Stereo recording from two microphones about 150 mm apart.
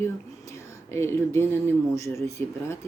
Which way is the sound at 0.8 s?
15° left (ahead or behind).